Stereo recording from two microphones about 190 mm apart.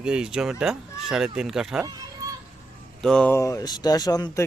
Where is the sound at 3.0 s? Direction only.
5° left (ahead or behind); by 4.4 s 20° left (ahead or behind).